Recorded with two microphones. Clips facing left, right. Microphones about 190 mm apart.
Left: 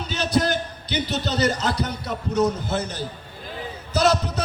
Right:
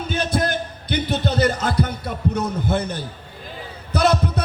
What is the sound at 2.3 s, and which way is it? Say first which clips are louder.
Speech: left 3 dB; 55° right (ahead or behind).